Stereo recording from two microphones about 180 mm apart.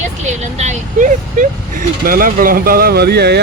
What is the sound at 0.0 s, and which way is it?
Speech, 40° right (ahead or behind).